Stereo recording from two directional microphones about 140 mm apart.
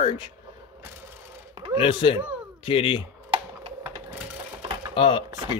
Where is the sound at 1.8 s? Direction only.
40° left (ahead or behind).